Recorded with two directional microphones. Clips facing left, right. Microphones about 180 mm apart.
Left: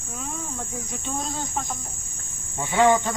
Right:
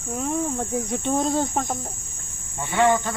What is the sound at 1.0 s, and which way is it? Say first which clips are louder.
Cricket: right 9 dB; 60° right (ahead or behind).